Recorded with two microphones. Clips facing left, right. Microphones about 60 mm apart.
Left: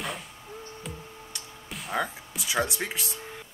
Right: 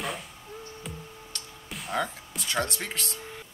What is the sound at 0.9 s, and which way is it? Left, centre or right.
Music, centre.